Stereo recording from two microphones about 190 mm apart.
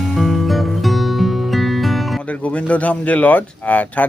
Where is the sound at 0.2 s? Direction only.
Centre (ahead or behind).